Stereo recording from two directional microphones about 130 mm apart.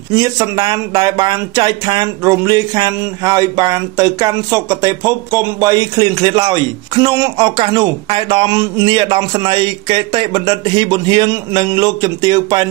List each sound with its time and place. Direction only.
0.1 s speech: 30° right (ahead or behind)